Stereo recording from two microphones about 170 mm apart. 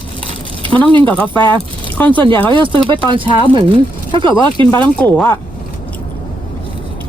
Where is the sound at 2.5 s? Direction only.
30° right (ahead or behind).